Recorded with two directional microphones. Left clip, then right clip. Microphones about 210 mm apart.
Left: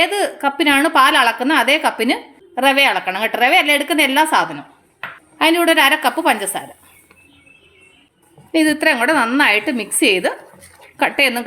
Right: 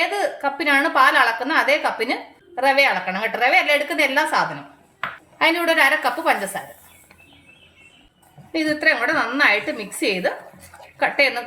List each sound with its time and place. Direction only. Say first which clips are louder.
0.0 s a woman's voice: left 4 dB; 50° left (ahead or behind)
8.5 s a woman's voice: left 4 dB; 50° left (ahead or behind)